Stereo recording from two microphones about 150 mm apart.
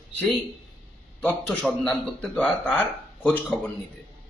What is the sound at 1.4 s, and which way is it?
Speech, 5° left (ahead or behind).